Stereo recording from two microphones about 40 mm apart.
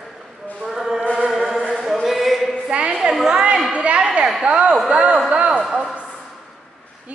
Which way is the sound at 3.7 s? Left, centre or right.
Right.